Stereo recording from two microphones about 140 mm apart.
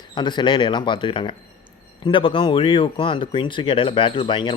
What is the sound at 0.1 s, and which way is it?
Speech, 35° left (ahead or behind).